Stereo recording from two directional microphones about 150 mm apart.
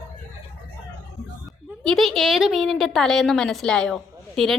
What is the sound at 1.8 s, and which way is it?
A woman's voice, centre (ahead or behind).